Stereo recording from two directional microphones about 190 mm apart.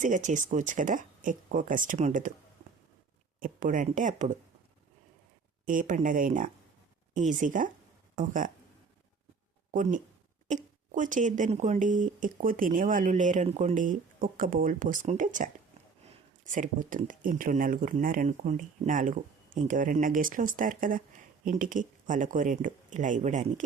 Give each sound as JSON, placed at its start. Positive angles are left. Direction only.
{"t": 0.0, "sound": "speech", "side_deg": -40}
{"t": 3.4, "sound": "speech", "side_deg": -45}
{"t": 5.6, "sound": "speech", "side_deg": -45}
{"t": 9.7, "sound": "speech", "side_deg": -45}